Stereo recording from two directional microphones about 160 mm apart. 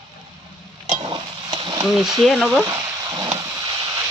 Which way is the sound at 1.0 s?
30° right (ahead or behind).